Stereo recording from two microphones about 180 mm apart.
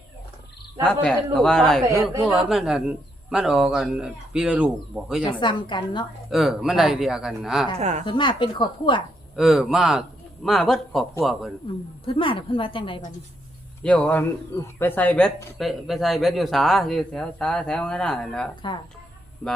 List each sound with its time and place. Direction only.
0.9 s speech: 5° left (ahead or behind)
5.2 s speech: 25° left (ahead or behind)
6.3 s speech: centre (ahead or behind)
7.8 s speech: 40° right (ahead or behind)
8.0 s speech: 25° left (ahead or behind)
9.3 s speech: centre (ahead or behind)
12.0 s speech: 30° left (ahead or behind)
13.8 s speech: 5° left (ahead or behind)